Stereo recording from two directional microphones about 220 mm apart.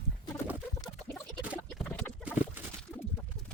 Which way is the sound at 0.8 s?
5° left (ahead or behind).